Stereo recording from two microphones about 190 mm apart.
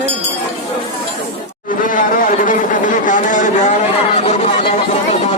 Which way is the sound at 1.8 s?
45° left (ahead or behind).